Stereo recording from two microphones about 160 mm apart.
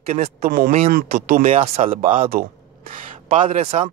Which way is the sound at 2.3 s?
65° right (ahead or behind).